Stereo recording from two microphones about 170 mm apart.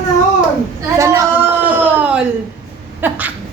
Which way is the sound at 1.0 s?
20° right (ahead or behind).